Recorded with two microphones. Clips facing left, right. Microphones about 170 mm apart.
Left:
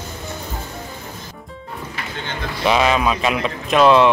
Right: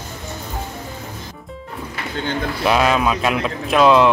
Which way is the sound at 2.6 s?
Centre (ahead or behind).